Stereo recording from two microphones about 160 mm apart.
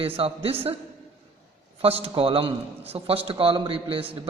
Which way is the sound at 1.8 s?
35° right (ahead or behind).